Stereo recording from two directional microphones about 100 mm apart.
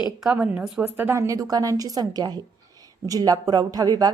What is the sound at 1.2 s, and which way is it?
A woman's voice, 35° right (ahead or behind).